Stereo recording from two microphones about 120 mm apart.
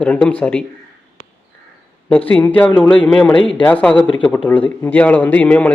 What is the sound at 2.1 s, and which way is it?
A man's voice, 10° left (ahead or behind).